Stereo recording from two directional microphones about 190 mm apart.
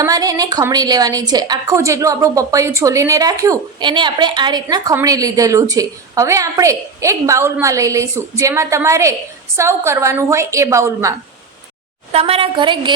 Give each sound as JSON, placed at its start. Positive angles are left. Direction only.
{"t": 0.0, "sound": "a woman's voice", "side_deg": -20}
{"t": 12.1, "sound": "a woman's voice", "side_deg": -30}